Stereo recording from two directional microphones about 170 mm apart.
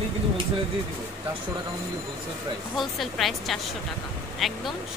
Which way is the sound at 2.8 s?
Centre (ahead or behind).